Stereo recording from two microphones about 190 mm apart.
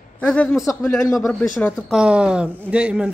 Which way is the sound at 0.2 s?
5° left (ahead or behind).